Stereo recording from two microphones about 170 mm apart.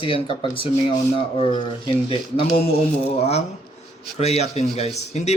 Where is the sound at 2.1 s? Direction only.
35° left (ahead or behind).